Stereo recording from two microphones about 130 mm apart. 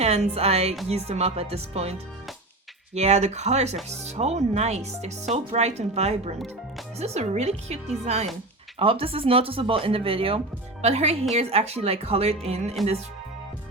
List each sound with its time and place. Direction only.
0.0 s speech: 55° right (ahead or behind)
8.8 s speech: 45° right (ahead or behind)
10.8 s speech: 55° right (ahead or behind)